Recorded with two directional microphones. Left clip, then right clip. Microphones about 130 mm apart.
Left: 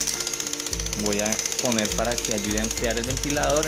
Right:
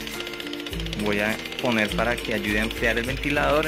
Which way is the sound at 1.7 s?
5° left (ahead or behind).